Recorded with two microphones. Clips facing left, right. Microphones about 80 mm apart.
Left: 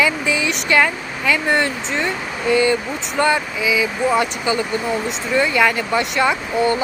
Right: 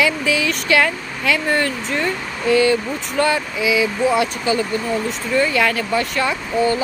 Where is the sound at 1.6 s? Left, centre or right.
Centre.